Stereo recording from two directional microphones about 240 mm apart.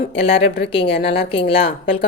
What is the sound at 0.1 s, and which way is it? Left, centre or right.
A woman's voice, left.